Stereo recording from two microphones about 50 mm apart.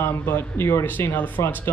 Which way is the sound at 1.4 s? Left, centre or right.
Left.